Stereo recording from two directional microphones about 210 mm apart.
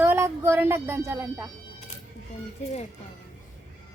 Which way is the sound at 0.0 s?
10° right (ahead or behind).